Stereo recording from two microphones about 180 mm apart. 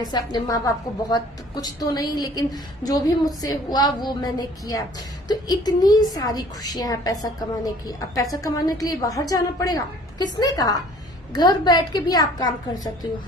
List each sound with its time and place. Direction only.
0.0 s a woman's voice: 20° left (ahead or behind)